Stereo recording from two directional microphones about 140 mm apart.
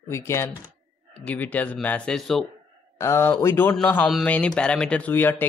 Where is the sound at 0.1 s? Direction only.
20° left (ahead or behind); by 2.4 s 5° left (ahead or behind).